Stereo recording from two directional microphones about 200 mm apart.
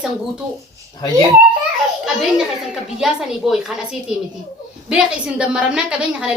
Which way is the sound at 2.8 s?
5° right (ahead or behind).